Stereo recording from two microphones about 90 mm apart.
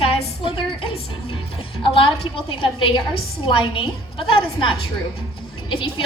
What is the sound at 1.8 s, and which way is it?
A woman's voice, 80° left.